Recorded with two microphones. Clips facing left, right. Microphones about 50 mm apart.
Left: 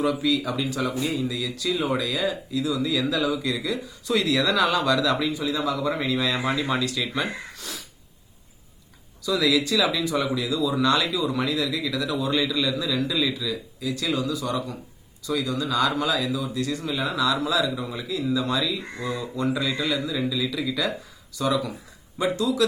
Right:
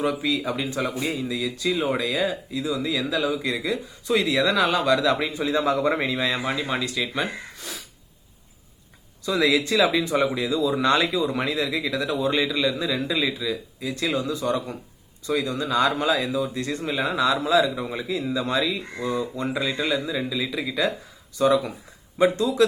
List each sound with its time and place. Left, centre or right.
0.0 s speech: right
1.1 s speech: centre
3.0 s speech: centre
3.4 s speech: right
6.4 s speech: centre
9.2 s speech: right